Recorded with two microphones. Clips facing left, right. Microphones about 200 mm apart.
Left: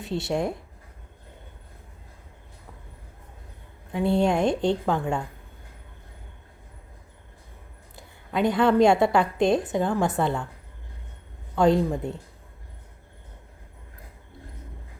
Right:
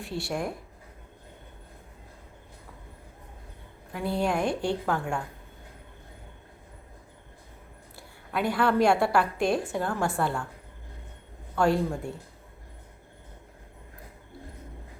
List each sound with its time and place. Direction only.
0.0 s a woman's voice: 20° left (ahead or behind)
3.9 s a woman's voice: 25° left (ahead or behind)
7.9 s a woman's voice: 20° left (ahead or behind)
11.5 s speech: 20° left (ahead or behind)